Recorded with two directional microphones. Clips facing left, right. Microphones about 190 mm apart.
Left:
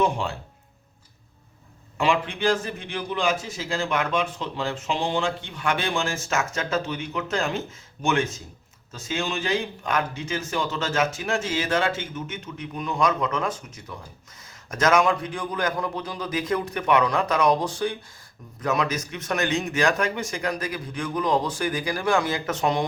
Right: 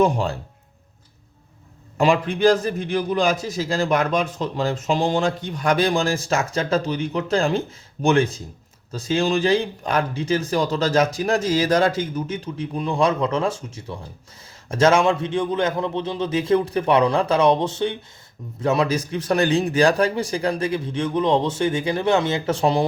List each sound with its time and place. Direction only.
0.0 s a man's voice: 40° right (ahead or behind)
2.0 s a man's voice: 40° right (ahead or behind)